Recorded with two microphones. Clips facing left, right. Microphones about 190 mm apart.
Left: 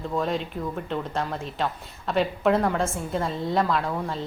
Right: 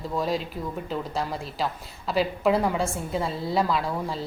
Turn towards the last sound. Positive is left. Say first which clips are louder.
# left 1 dB
turn(degrees=0)  # may be behind; listen again after turning